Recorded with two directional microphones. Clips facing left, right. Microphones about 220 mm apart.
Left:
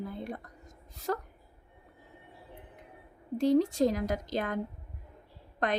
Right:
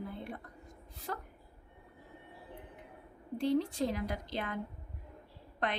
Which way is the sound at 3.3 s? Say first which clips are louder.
Left 6 dB; 45° left (ahead or behind).